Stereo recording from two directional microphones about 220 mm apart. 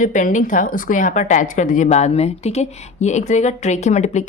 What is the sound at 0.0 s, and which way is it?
A woman's voice, 35° left (ahead or behind).